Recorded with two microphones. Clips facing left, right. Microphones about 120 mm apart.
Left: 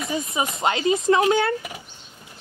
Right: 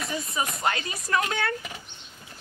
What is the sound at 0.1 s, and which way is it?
Speech, 20° left (ahead or behind).